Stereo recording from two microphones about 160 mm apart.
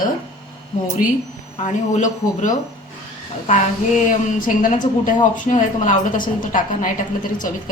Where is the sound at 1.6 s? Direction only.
45° left (ahead or behind).